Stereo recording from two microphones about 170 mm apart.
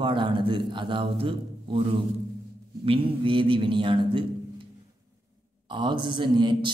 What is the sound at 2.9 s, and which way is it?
A man's voice, 30° right (ahead or behind).